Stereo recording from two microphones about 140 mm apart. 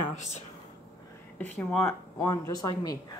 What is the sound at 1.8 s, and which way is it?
Speech, 15° left (ahead or behind).